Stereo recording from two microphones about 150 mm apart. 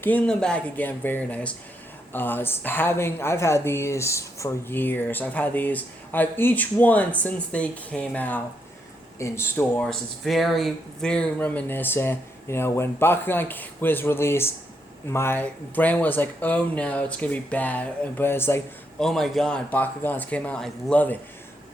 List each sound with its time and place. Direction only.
0.0 s speech: 10° left (ahead or behind)
9.8 s speech: 5° left (ahead or behind)
18.9 s speech: centre (ahead or behind)